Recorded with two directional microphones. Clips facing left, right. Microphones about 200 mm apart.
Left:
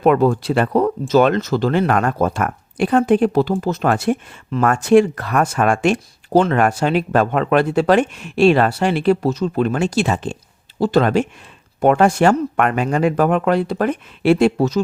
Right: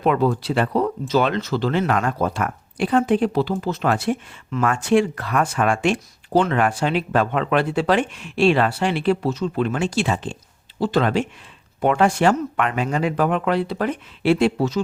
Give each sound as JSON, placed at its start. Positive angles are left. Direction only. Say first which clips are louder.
{"t": 0.0, "sound": "speech", "louder": "left 5 dB", "side_deg": 50}